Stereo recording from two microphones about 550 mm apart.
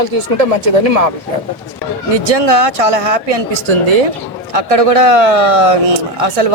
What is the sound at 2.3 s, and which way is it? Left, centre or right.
A man's voice, right.